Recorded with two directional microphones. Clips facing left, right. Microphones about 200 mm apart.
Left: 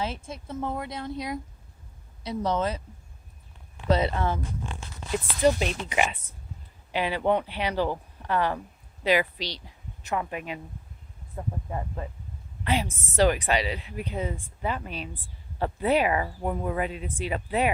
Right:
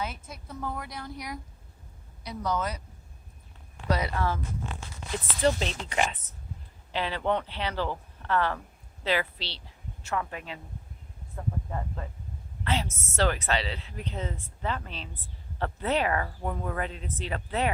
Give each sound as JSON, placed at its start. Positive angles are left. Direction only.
{"t": 0.0, "sound": "speech", "side_deg": 25}
{"t": 5.4, "sound": "a woman's voice", "side_deg": 15}